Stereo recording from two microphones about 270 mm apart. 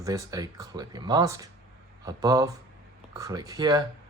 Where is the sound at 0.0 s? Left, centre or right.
Centre.